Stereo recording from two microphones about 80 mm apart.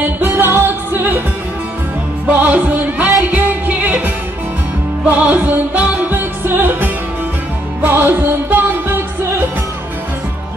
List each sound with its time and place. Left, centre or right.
0.2 s music: right
2.2 s music: centre